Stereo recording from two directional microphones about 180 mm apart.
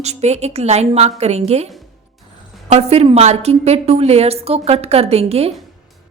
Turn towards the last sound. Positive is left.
turn(degrees=-35)  # may be behind; listen again after turning